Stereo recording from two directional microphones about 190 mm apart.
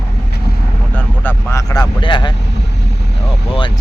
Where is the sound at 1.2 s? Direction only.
15° left (ahead or behind).